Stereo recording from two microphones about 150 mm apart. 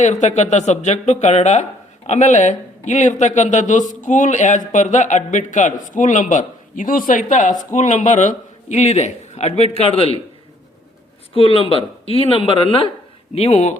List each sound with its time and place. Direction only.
0.0 s a man's voice: 50° left (ahead or behind)
11.3 s a woman's voice: 40° left (ahead or behind)